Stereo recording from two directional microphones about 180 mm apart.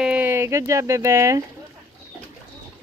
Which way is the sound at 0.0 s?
10° right (ahead or behind).